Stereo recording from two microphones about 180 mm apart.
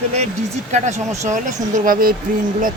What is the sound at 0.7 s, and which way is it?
Speech, 40° right (ahead or behind).